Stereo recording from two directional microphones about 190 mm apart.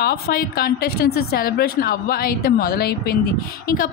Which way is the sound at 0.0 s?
55° left (ahead or behind).